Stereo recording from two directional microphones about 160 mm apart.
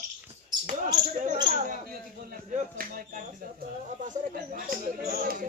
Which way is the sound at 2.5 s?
60° right (ahead or behind).